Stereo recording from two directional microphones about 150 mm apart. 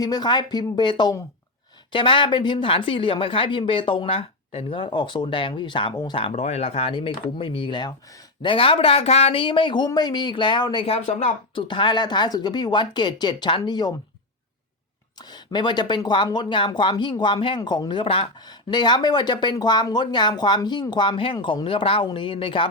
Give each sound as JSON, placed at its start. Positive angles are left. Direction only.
{"t": 0.0, "sound": "speech", "side_deg": 25}
{"t": 6.3, "sound": "speech", "side_deg": 45}
{"t": 11.5, "sound": "speech", "side_deg": 35}
{"t": 15.2, "sound": "speech", "side_deg": 30}